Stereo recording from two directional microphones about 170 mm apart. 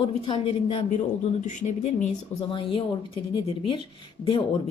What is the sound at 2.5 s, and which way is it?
A woman's voice, 30° left (ahead or behind).